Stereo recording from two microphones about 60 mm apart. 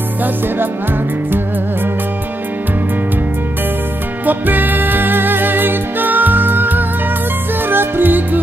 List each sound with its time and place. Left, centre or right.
4.3 s music: right